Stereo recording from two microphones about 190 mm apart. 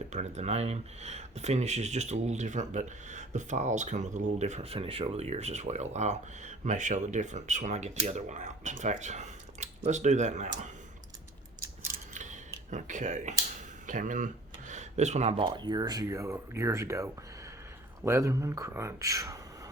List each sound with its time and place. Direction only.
0.1 s speech: 35° right (ahead or behind)
12.1 s a sound: 40° right (ahead or behind)
12.7 s speech: 40° right (ahead or behind); by 19.4 s 15° right (ahead or behind)